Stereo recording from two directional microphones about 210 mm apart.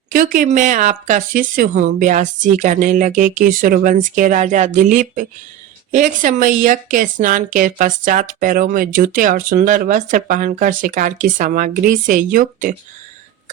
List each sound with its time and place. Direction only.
0.1 s a woman's voice: 40° right (ahead or behind)